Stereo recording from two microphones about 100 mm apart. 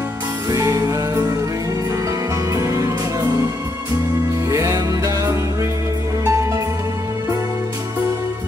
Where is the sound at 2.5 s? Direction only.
30° right (ahead or behind).